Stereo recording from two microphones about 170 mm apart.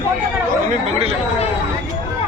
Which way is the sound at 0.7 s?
35° right (ahead or behind).